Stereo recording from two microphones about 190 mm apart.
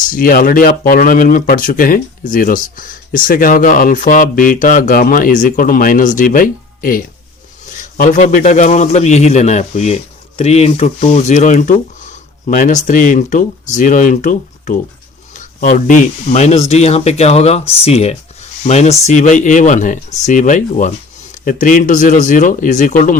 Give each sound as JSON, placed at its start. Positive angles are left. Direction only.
{"t": 0.0, "sound": "a man's voice", "side_deg": 45}